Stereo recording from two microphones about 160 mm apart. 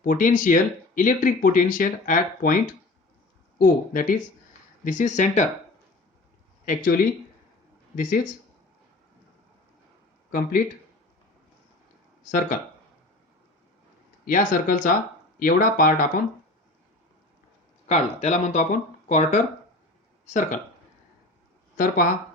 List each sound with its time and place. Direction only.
0.0 s speech: 55° left (ahead or behind)
3.6 s speech: 55° left (ahead or behind)
6.7 s speech: 60° left (ahead or behind)
12.2 s speech: 55° left (ahead or behind)
14.3 s speech: 55° left (ahead or behind)
17.8 s speech: 45° left (ahead or behind)
21.8 s speech: 60° left (ahead or behind)